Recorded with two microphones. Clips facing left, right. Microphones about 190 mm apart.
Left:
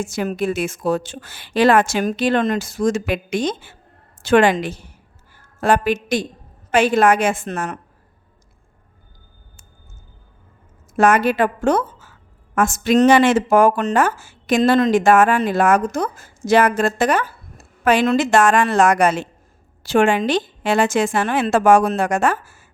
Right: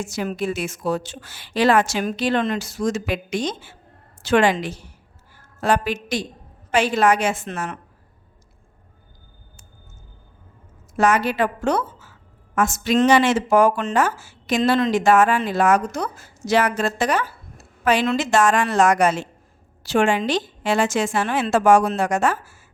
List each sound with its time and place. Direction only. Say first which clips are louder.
0.0 s speech: left 3 dB; 50° left (ahead or behind)
10.9 s a woman's voice: left 4 dB; 50° left (ahead or behind)
18.3 s a woman's voice: left 3 dB; 60° left (ahead or behind)